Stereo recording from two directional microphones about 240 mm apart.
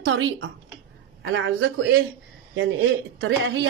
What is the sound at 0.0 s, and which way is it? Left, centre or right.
A woman's voice, right.